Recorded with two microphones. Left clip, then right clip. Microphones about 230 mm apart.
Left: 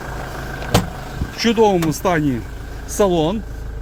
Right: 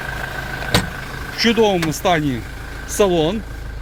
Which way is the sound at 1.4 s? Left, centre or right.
Centre.